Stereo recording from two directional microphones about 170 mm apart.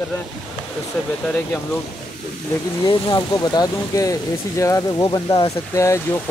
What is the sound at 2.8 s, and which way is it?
Speech, 25° left (ahead or behind).